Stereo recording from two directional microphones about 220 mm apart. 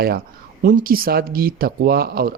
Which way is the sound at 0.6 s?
40° right (ahead or behind).